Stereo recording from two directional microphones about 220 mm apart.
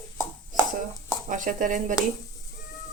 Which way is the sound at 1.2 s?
35° right (ahead or behind).